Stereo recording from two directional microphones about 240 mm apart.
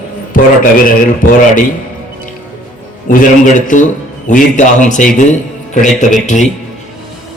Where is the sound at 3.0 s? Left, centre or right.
Left.